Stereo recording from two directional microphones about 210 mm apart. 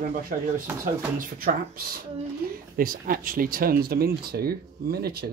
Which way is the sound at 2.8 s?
40° right (ahead or behind).